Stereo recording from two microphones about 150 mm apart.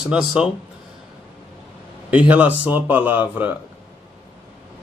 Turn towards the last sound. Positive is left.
turn(degrees=-10)  # may be behind; listen again after turning